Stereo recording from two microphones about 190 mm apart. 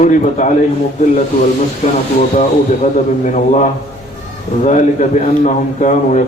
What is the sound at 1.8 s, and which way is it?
Speech, 35° left (ahead or behind).